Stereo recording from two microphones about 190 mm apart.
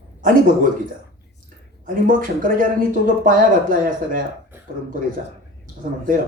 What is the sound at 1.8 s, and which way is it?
Speech, 45° right (ahead or behind).